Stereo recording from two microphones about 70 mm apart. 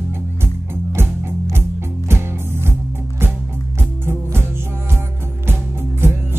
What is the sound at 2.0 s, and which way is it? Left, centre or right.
Music, right.